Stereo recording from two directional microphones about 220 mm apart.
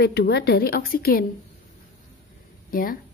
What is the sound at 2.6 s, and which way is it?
Speech, 40° left (ahead or behind).